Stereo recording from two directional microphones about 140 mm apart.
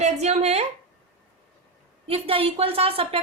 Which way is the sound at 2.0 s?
40° right (ahead or behind).